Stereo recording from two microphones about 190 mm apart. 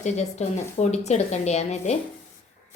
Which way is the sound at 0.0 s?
35° left (ahead or behind).